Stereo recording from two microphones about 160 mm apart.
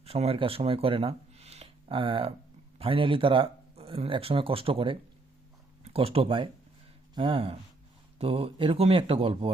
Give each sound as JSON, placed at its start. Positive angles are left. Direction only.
{"t": 0.0, "sound": "speech", "side_deg": -40}